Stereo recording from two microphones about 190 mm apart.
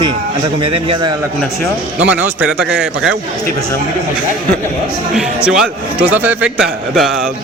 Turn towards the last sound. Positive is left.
turn(degrees=0)  # may be behind; listen again after turning